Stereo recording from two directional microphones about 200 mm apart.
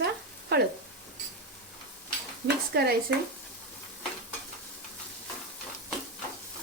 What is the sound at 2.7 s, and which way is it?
Speech, 55° right (ahead or behind).